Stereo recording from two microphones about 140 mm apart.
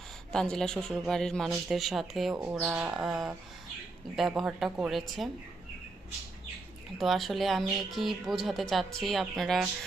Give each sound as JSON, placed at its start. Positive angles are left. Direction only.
{"t": 0.3, "sound": "speech", "side_deg": 5}
{"t": 7.0, "sound": "speech", "side_deg": 0}